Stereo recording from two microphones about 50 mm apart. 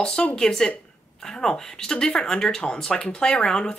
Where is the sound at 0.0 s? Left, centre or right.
Centre.